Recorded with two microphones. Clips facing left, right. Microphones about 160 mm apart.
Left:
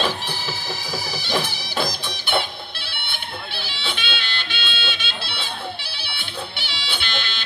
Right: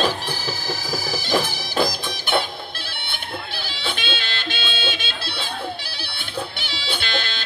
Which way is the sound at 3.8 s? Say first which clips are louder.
Right 3 dB; 45° right (ahead or behind).